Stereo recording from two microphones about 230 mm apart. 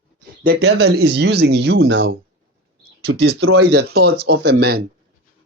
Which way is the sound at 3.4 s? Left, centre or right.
Right.